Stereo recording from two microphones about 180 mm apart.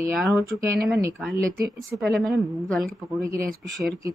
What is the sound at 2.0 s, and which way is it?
Speech, centre (ahead or behind).